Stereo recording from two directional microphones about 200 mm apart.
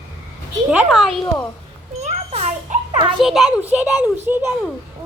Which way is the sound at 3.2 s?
Centre (ahead or behind).